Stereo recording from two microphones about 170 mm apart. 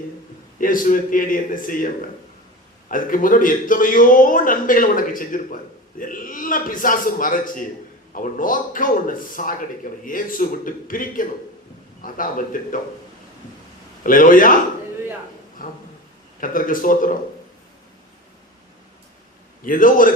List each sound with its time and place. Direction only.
0.6 s a man's voice: 55° left (ahead or behind)
14.0 s a man's voice: 55° left (ahead or behind)
15.6 s a man's voice: 55° left (ahead or behind)
19.6 s a man's voice: 55° left (ahead or behind)